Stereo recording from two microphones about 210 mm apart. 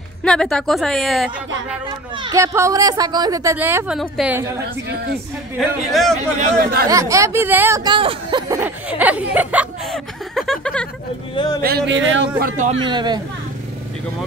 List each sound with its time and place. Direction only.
0.2 s a woman's voice: 5° left (ahead or behind)
2.1 s a woman's voice: 20° right (ahead or behind)
5.6 s a woman's voice: centre (ahead or behind)
6.9 s a woman's voice: 15° right (ahead or behind)
8.5 s speech: 10° right (ahead or behind)
11.3 s speech: 20° left (ahead or behind)
11.6 s speech: 50° right (ahead or behind)
12.4 s a man's voice: 40° right (ahead or behind)
12.8 s speech: 20° right (ahead or behind)